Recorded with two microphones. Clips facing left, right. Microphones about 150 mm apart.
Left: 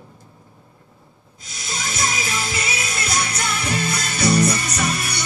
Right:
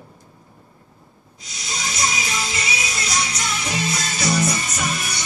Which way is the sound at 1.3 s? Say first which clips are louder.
Even; 50° left (ahead or behind).